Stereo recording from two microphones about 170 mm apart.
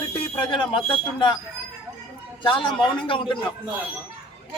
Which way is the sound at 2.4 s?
30° left (ahead or behind).